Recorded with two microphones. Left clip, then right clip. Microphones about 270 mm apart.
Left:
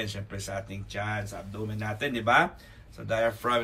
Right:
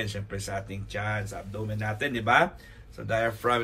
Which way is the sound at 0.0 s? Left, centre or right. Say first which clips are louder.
Right 2 dB; centre.